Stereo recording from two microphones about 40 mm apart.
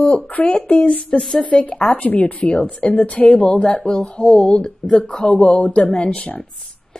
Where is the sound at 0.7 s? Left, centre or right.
Centre.